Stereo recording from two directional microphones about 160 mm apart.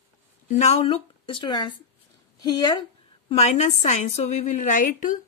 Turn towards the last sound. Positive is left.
turn(degrees=55)  # may be behind; listen again after turning